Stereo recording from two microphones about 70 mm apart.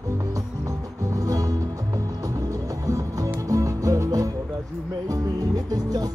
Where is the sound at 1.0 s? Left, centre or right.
Right.